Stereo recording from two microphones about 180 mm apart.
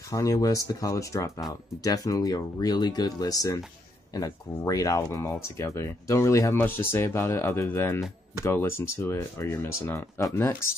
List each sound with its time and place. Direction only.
0.1 s speech: 20° left (ahead or behind)